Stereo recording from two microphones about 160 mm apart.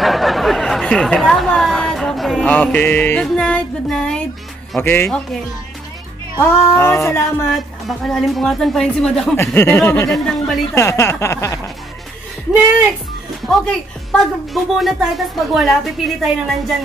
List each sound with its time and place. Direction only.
0.0 s speech: centre (ahead or behind)
6.4 s speech: 15° left (ahead or behind)
7.5 s a woman's voice: centre (ahead or behind)
10.2 s a woman's voice: 5° left (ahead or behind)
10.7 s speech: 15° left (ahead or behind)
13.5 s a woman's voice: centre (ahead or behind)